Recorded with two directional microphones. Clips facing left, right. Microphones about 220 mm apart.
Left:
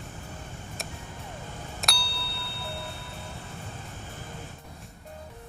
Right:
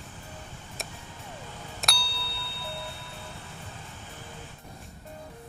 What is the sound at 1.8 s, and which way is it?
Tubular bells, centre (ahead or behind).